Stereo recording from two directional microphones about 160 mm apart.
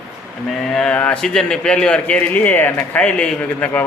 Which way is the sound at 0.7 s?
5° left (ahead or behind).